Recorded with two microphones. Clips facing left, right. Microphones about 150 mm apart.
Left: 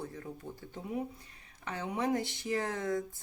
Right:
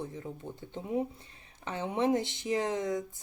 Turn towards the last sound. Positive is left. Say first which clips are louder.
# right 2 dB
turn(degrees=-20)  # may be behind; listen again after turning